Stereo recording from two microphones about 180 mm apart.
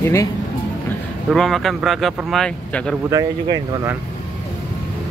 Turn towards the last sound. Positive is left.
turn(degrees=-20)  # may be behind; listen again after turning